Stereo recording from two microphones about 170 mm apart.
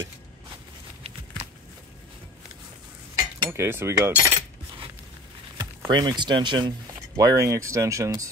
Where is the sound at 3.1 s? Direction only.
15° right (ahead or behind).